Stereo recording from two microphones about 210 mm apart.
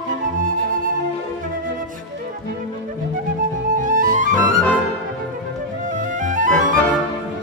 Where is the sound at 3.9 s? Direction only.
40° right (ahead or behind).